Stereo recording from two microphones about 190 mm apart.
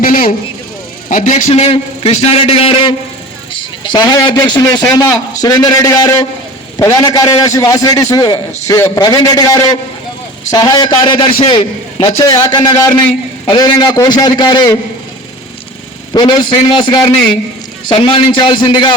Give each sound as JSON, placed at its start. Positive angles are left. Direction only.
{"t": 0.0, "sound": "a sound", "side_deg": 50}
{"t": 1.1, "sound": "a man's voice", "side_deg": 40}
{"t": 16.1, "sound": "a man's voice", "side_deg": 25}